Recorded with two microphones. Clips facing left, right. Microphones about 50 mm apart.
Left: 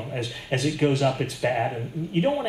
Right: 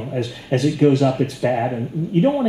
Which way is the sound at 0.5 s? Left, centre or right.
Left.